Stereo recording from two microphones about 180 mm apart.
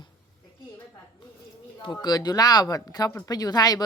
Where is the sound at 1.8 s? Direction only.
25° left (ahead or behind).